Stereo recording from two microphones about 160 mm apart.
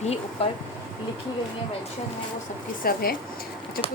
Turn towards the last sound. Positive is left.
turn(degrees=65)  # may be behind; listen again after turning